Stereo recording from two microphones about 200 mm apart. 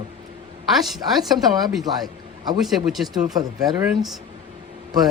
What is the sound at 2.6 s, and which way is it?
Speech, centre (ahead or behind).